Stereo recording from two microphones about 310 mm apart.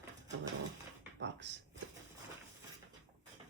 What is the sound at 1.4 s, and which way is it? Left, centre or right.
Speech, right.